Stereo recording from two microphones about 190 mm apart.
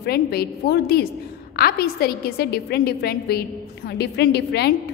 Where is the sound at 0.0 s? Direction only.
55° left (ahead or behind).